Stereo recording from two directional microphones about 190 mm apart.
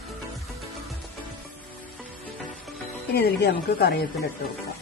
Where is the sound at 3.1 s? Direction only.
55° left (ahead or behind).